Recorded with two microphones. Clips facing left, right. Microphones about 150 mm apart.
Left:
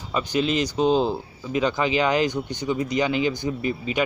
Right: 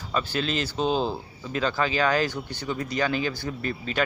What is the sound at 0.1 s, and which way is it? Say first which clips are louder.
Speech: left 4 dB; 15° left (ahead or behind).